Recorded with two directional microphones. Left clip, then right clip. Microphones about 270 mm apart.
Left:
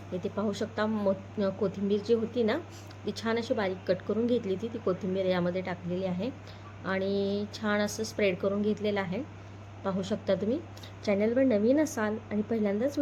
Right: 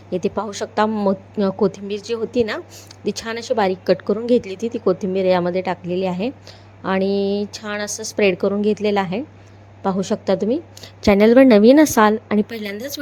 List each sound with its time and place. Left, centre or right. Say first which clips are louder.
0.1 s a woman's voice: right 10 dB; right